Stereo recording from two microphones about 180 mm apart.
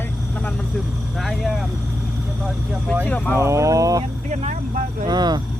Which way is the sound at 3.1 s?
10° left (ahead or behind).